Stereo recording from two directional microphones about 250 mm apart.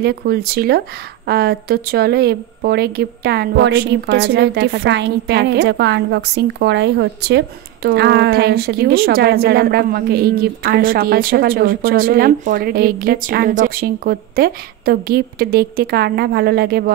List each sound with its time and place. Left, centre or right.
0.0 s a woman's voice: right